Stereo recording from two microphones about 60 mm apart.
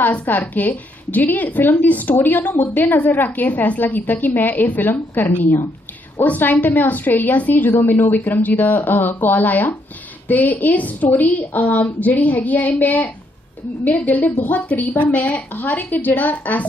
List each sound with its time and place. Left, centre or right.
0.0 s a woman's voice: left